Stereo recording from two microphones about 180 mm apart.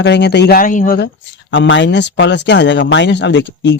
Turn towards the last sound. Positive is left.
turn(degrees=75)  # may be behind; listen again after turning